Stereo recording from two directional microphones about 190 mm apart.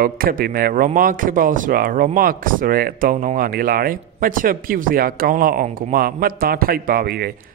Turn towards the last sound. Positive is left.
turn(degrees=-55)  # may be behind; listen again after turning